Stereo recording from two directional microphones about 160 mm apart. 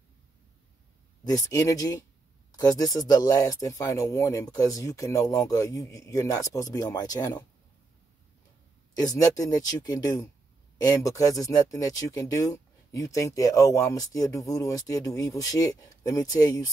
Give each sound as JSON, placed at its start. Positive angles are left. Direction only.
{"t": 1.3, "sound": "speech", "side_deg": 20}
{"t": 8.9, "sound": "speech", "side_deg": 20}